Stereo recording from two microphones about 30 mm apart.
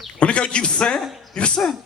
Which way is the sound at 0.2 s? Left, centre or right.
Left.